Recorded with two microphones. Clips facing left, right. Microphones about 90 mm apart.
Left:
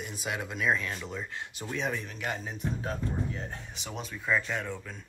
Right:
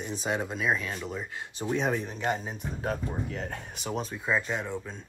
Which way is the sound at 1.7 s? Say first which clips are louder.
Right 4 dB; 35° right (ahead or behind).